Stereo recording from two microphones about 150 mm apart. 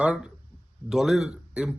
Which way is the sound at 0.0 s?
5° right (ahead or behind).